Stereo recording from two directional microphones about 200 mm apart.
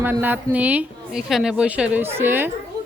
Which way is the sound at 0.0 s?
10° right (ahead or behind).